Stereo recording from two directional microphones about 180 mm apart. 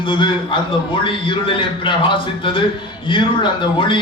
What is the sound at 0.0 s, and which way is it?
A man's voice, 25° left (ahead or behind).